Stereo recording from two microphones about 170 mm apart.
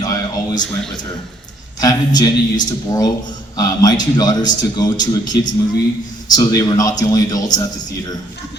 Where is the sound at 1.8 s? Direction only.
20° left (ahead or behind).